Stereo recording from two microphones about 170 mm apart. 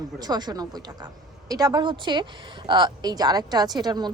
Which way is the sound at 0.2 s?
25° right (ahead or behind).